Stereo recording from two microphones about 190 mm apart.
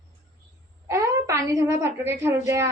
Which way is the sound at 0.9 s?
15° right (ahead or behind).